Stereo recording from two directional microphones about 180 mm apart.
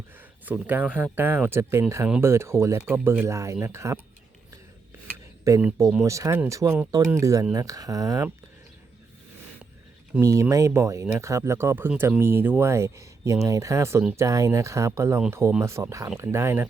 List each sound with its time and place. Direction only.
0.4 s speech: 10° right (ahead or behind)
2.0 s speech: 5° right (ahead or behind)
5.5 s speech: 15° right (ahead or behind)
10.2 s speech: 15° right (ahead or behind)